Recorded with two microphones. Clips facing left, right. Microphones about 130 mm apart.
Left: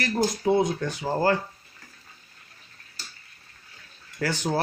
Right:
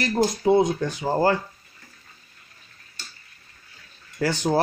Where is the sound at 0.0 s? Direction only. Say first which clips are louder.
Right 3 dB; 25° right (ahead or behind).